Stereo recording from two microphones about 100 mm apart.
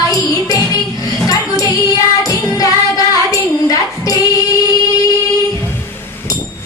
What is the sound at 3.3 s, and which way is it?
Child singing, 35° left (ahead or behind).